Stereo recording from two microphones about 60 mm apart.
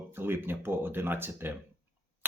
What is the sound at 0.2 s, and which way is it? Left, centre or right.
Speech, right.